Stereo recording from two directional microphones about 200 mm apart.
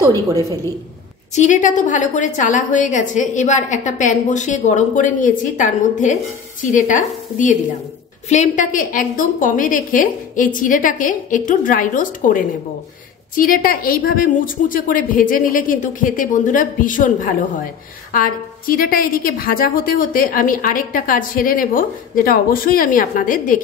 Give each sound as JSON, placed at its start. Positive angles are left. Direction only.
{"t": 0.0, "sound": "a woman's voice", "side_deg": -15}
{"t": 1.3, "sound": "a woman's voice", "side_deg": 35}